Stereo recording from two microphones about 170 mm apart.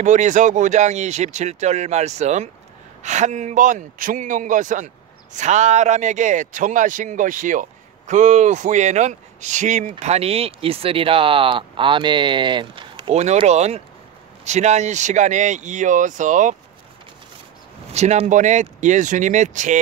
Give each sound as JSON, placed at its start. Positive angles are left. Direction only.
{"t": 0.0, "sound": "a man's voice", "side_deg": -45}
{"t": 17.9, "sound": "a man's voice", "side_deg": -40}